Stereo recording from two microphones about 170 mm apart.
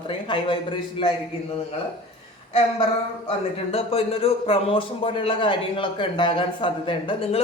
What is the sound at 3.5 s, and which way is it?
Speech, 35° left (ahead or behind).